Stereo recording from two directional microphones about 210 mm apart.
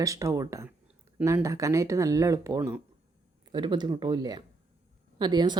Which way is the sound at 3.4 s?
20° right (ahead or behind).